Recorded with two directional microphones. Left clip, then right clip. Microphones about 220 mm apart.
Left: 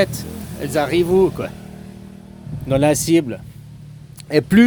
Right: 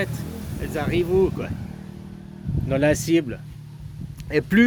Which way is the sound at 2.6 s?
15° left (ahead or behind).